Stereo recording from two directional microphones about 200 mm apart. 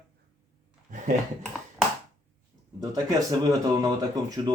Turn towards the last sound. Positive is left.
turn(degrees=-20)  # may be behind; listen again after turning